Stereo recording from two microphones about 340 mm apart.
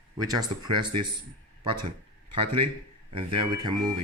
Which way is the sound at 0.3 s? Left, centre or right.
Centre.